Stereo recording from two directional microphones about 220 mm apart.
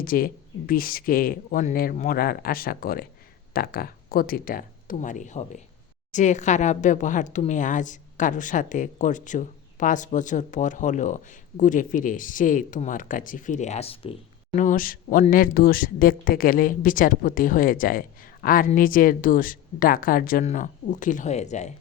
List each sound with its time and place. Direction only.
0.0 s speech: 40° left (ahead or behind)